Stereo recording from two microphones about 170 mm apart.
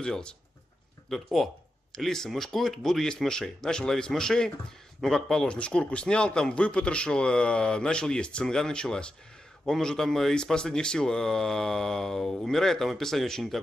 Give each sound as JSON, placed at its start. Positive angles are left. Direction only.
{"t": 0.0, "sound": "a man's voice", "side_deg": 5}